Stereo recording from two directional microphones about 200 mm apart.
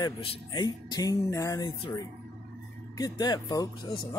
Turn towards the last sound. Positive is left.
turn(degrees=20)  # may be behind; listen again after turning